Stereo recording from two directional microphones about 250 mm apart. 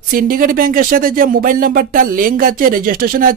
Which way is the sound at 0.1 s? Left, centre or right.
Right.